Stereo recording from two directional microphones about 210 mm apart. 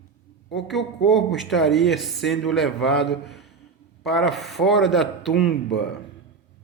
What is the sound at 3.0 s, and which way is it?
Speech, 55° left (ahead or behind).